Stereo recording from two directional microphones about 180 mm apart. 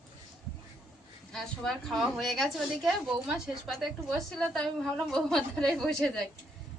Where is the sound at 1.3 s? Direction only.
Centre (ahead or behind).